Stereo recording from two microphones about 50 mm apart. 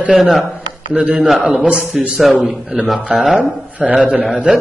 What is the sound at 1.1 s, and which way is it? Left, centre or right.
A man's voice, centre.